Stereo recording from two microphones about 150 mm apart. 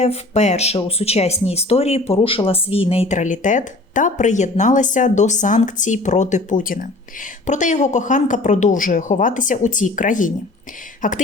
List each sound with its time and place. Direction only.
0.0 s speech: 45° left (ahead or behind); by 6.8 s 65° left (ahead or behind)
7.4 s speech: 55° left (ahead or behind)